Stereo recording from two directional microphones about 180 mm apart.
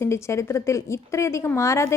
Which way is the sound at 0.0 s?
15° left (ahead or behind).